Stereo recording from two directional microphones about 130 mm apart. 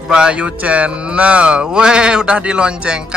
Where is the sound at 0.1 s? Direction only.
5° right (ahead or behind).